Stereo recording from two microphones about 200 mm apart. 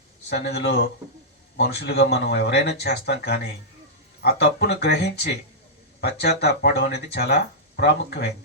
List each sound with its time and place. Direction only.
0.4 s speech: 55° left (ahead or behind)